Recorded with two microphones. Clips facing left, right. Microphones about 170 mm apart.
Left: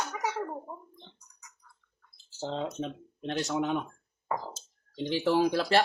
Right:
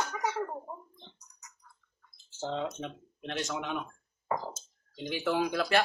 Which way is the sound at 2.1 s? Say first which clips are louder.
Even; 35° left (ahead or behind).